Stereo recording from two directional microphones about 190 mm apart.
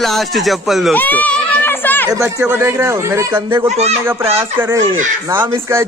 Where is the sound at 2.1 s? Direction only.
15° right (ahead or behind).